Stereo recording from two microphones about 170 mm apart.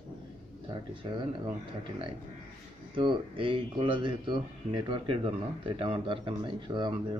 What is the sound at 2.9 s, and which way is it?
Speech, 30° right (ahead or behind).